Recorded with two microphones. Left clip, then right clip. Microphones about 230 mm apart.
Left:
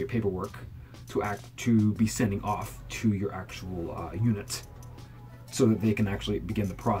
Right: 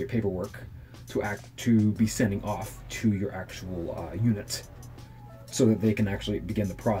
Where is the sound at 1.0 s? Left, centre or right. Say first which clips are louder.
Even; centre.